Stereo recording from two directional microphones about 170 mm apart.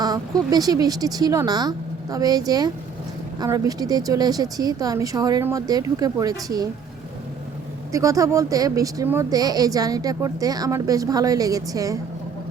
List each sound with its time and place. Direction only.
0.5 s a woman's voice: 20° right (ahead or behind)
7.9 s a woman's voice: 20° right (ahead or behind)